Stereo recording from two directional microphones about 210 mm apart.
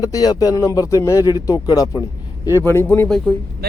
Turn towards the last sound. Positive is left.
turn(degrees=5)  # may be behind; listen again after turning